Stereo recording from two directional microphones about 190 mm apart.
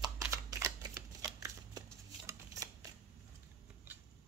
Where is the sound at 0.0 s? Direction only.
20° right (ahead or behind).